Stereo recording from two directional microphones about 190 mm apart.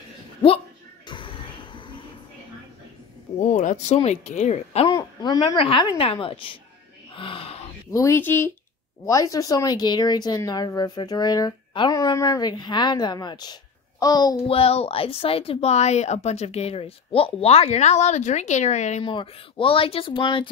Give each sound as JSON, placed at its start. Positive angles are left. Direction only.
{"t": 1.0, "sound": "music", "side_deg": 25}
{"t": 3.3, "sound": "speech", "side_deg": 40}
{"t": 4.9, "sound": "speech", "side_deg": 20}
{"t": 7.2, "sound": "a sound", "side_deg": 30}
{"t": 7.9, "sound": "speech", "side_deg": 15}
{"t": 14.5, "sound": "speech", "side_deg": 30}